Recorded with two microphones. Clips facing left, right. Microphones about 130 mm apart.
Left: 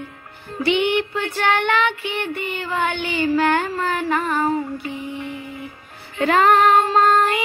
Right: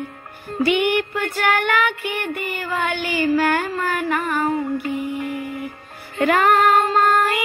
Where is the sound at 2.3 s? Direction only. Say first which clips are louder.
Even; 25° left (ahead or behind).